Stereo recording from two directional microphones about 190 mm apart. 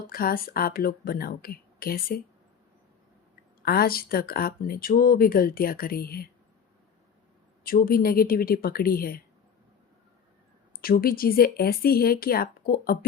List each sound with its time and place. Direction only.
0.1 s speech: 50° left (ahead or behind)
3.6 s speech: 55° left (ahead or behind)
7.6 s speech: 50° left (ahead or behind)
10.8 s speech: 50° left (ahead or behind)